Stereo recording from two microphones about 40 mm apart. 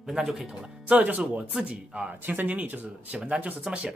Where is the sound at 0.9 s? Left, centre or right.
Right.